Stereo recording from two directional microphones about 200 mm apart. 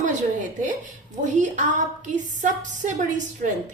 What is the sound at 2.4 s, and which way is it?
A woman's voice, 40° right (ahead or behind).